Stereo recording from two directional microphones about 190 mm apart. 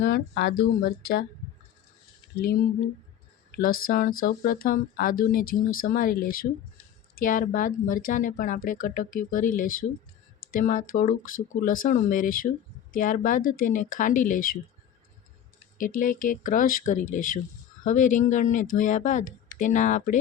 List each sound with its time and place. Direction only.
0.0 s speech: 60° left (ahead or behind)
3.5 s speech: 50° left (ahead or behind)
15.8 s speech: 45° left (ahead or behind)